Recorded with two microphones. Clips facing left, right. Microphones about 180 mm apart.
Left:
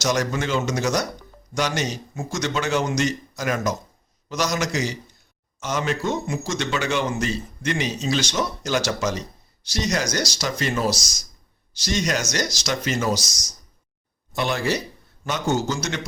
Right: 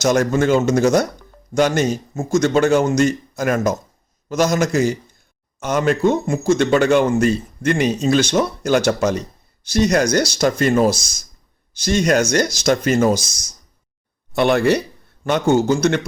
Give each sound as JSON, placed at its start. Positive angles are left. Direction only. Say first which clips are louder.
{"t": 0.0, "sound": "speech", "louder": "right 7 dB", "side_deg": -50}